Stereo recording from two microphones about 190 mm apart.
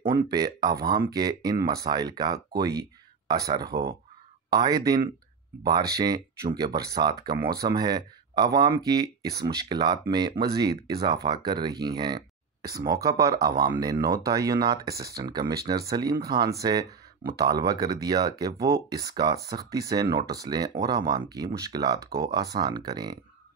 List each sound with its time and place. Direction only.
0.1 s speech: 20° right (ahead or behind)
1.6 s speech: 55° right (ahead or behind)
1.9 s speech: 20° right (ahead or behind)
3.4 s speech: 20° right (ahead or behind)